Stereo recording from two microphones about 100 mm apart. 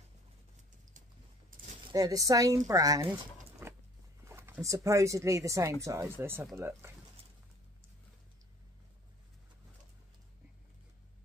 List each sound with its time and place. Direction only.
1.9 s speech: 35° right (ahead or behind)
3.6 s a sound: 25° right (ahead or behind)
4.2 s speech: 25° right (ahead or behind)